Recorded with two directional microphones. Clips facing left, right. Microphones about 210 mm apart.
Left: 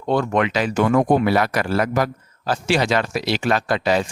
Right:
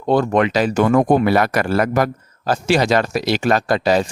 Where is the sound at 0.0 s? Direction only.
35° right (ahead or behind).